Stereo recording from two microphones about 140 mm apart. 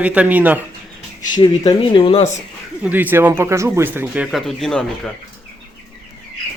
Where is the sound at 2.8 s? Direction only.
15° right (ahead or behind); by 4.8 s centre (ahead or behind).